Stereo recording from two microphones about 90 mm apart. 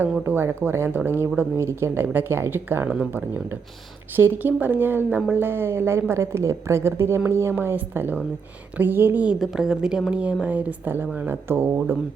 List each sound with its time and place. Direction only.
0.3 s speech: 25° right (ahead or behind)
9.4 s a woman's voice: 5° right (ahead or behind); by 11.7 s 25° right (ahead or behind)